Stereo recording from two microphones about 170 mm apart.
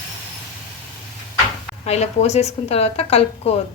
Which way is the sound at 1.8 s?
40° left (ahead or behind).